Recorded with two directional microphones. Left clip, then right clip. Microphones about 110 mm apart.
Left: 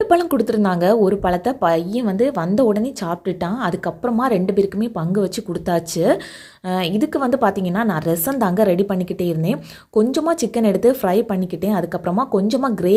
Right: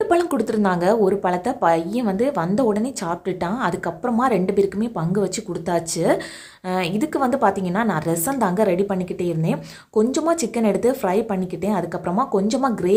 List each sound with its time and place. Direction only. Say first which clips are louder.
0.0 s a woman's voice: left 3 dB; 30° left (ahead or behind)